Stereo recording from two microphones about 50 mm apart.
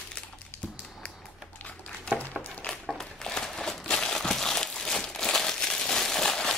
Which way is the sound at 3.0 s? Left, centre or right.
Centre.